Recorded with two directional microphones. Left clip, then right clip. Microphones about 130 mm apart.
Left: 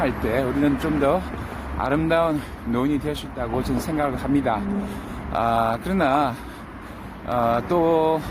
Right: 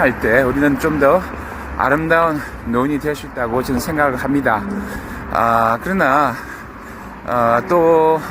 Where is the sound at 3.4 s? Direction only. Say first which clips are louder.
Right 7 dB; 10° right (ahead or behind).